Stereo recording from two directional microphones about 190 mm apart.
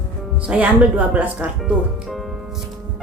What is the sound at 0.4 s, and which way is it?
Speech, 5° right (ahead or behind).